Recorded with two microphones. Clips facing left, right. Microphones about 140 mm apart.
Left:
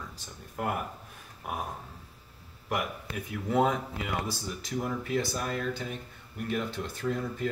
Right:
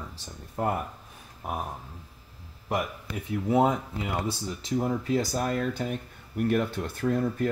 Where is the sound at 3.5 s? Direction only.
20° right (ahead or behind).